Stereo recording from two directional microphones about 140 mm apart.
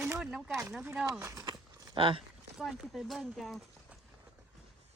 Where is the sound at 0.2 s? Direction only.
5° right (ahead or behind).